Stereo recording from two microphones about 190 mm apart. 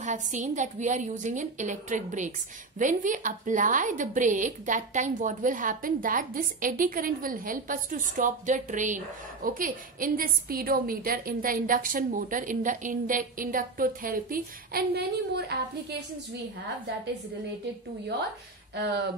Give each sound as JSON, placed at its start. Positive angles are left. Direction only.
{"t": 0.0, "sound": "a woman's voice", "side_deg": -40}